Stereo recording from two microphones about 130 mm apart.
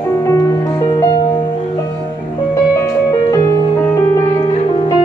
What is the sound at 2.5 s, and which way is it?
Music, 20° left (ahead or behind).